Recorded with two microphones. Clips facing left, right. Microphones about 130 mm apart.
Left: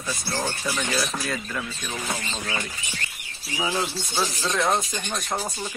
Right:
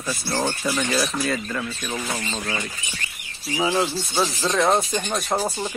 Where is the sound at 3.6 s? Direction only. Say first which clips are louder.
Right 5 dB; 25° right (ahead or behind).